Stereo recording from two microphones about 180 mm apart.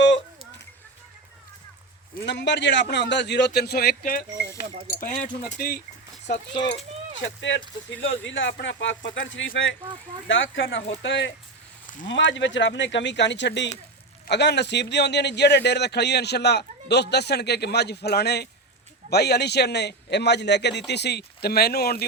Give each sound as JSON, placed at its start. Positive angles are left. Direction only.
{"t": 2.2, "sound": "a man's voice", "side_deg": 75}
{"t": 7.2, "sound": "a man's voice", "side_deg": 90}